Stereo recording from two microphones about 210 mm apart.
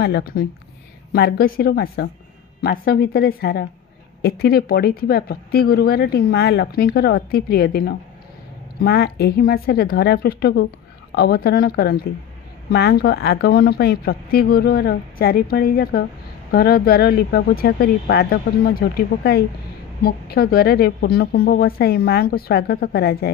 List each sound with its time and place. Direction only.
0.0 s speech: 45° left (ahead or behind)